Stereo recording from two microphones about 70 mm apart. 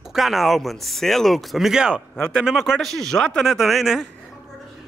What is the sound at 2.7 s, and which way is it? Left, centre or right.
Speech, centre.